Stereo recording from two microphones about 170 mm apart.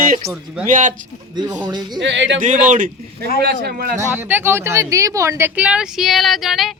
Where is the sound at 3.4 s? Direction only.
65° right (ahead or behind).